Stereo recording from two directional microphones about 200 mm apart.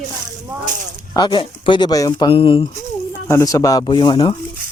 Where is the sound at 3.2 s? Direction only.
15° left (ahead or behind).